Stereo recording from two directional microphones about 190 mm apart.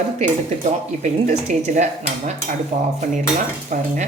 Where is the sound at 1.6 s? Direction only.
40° right (ahead or behind).